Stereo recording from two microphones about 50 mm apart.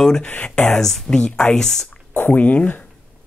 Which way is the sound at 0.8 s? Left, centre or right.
Centre.